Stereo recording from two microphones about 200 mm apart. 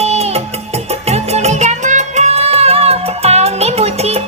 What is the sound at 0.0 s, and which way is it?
Music, 30° right (ahead or behind).